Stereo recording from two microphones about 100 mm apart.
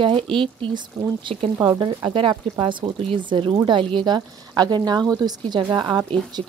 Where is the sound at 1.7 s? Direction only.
55° right (ahead or behind).